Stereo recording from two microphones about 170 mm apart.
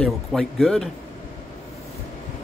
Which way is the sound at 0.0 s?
Centre (ahead or behind).